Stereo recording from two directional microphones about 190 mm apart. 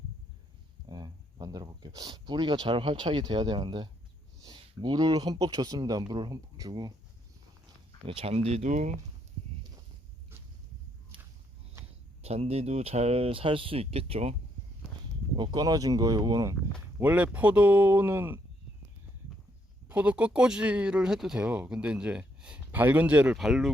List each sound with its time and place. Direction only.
0.9 s speech: 20° right (ahead or behind)
8.0 s speech: 30° right (ahead or behind)
12.2 s speech: 35° right (ahead or behind)
15.4 s speech: 20° right (ahead or behind)
17.0 s speech: 10° right (ahead or behind)
19.9 s speech: 5° right (ahead or behind)